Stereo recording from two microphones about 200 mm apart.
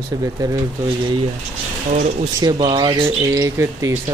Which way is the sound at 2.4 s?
20° right (ahead or behind).